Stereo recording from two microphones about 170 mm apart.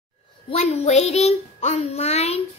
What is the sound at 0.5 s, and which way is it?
Child singing, 40° left (ahead or behind).